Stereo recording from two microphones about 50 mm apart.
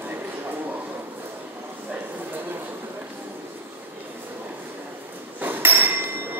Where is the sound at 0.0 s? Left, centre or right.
Right.